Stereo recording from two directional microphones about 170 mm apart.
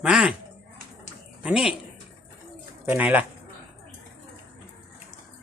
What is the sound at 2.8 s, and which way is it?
Speech, 10° right (ahead or behind).